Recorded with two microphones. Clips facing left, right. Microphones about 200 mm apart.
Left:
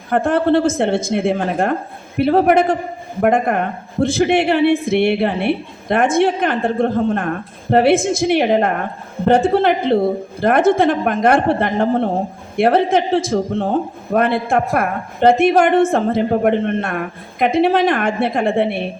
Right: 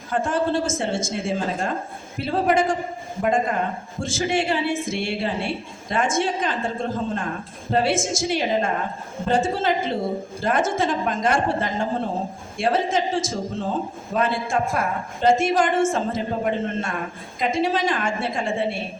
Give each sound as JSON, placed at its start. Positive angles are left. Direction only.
{"t": 0.1, "sound": "a woman's voice", "side_deg": 60}